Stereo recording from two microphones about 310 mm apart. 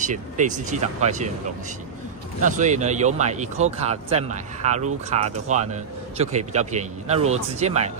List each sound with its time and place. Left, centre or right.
0.0 s speech: right
2.4 s speech: right